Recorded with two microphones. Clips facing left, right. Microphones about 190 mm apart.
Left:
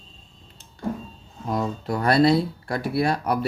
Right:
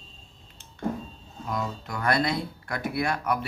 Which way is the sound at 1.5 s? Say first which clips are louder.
Left 6 dB; 30° left (ahead or behind).